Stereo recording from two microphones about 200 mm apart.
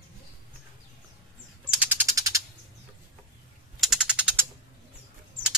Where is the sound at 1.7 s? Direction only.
10° right (ahead or behind).